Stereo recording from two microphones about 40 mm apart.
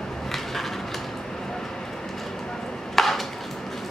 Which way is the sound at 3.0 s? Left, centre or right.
Centre.